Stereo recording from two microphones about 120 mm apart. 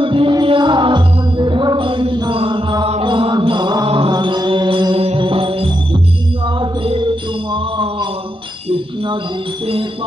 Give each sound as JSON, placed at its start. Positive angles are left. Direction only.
{"t": 0.0, "sound": "music", "side_deg": -45}
{"t": 2.9, "sound": "chant", "side_deg": -45}
{"t": 5.0, "sound": "music", "side_deg": -50}
{"t": 7.5, "sound": "mantra", "side_deg": -40}